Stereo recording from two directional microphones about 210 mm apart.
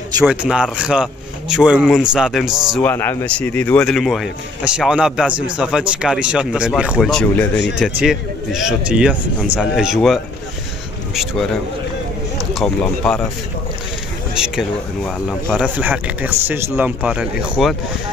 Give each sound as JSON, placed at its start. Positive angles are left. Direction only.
{"t": 0.2, "sound": "speech", "side_deg": -5}
{"t": 2.7, "sound": "speech", "side_deg": 10}
{"t": 7.5, "sound": "speech", "side_deg": 55}
{"t": 7.8, "sound": "speech", "side_deg": 0}
{"t": 12.5, "sound": "speech", "side_deg": 5}
{"t": 14.3, "sound": "speech", "side_deg": -5}